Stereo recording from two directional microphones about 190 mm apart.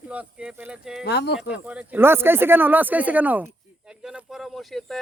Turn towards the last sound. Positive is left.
turn(degrees=0)  # may be behind; listen again after turning